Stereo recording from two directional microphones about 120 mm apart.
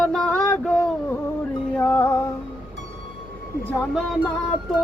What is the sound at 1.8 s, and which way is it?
Music, 20° left (ahead or behind).